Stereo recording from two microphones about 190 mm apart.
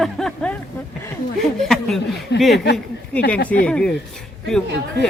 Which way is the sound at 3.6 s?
5° left (ahead or behind).